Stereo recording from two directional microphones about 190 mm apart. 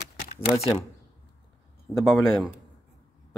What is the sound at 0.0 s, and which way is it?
Typing, 55° left (ahead or behind).